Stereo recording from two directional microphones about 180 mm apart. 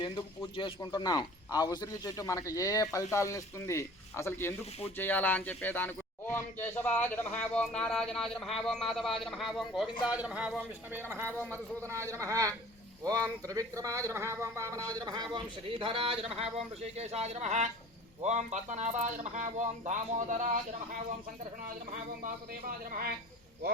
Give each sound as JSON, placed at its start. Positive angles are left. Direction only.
{"t": 0.0, "sound": "a man's voice", "side_deg": 25}
{"t": 22.2, "sound": "speech", "side_deg": -50}